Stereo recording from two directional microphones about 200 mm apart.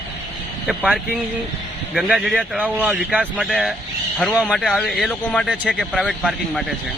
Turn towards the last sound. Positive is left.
turn(degrees=0)  # may be behind; listen again after turning